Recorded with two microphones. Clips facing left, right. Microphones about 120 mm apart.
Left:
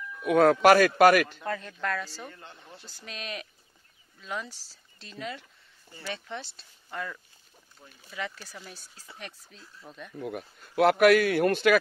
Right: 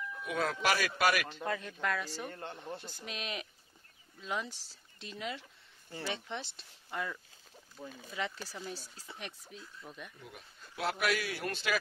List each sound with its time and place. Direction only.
0.2 s a man's voice: 60° left (ahead or behind)
1.4 s speech: 10° right (ahead or behind)
2.3 s speech: 50° right (ahead or behind)
3.1 s speech: 20° right (ahead or behind)
8.1 s speech: 25° right (ahead or behind)
9.6 s speech: centre (ahead or behind)
10.1 s speech: 60° left (ahead or behind)